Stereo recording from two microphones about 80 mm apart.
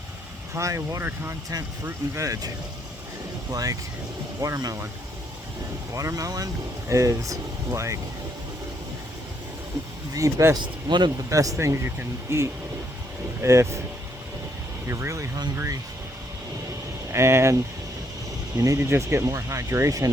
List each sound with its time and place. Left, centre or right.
0.5 s speech: right
3.5 s speech: right
5.9 s speech: right
10.2 s speech: right
10.6 s speech: right
11.3 s speech: right
14.8 s speech: right
17.1 s speech: right